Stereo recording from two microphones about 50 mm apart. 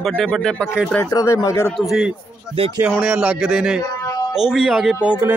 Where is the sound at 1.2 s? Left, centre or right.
Left.